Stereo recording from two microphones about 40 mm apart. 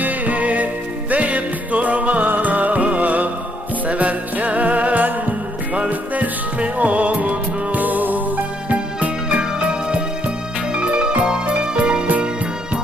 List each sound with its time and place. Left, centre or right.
0.0 s music: right
8.7 s music: right